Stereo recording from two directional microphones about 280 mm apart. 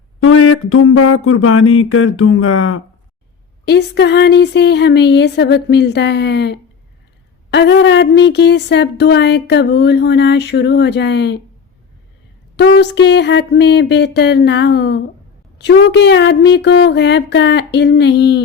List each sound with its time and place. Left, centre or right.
0.2 s a sound: left
3.7 s speech: left
12.5 s speech: left